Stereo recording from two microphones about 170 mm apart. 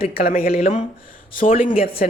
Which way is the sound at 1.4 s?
50° left (ahead or behind).